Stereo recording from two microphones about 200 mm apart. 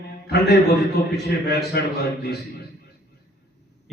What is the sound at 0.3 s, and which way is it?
A man's voice, 55° left (ahead or behind).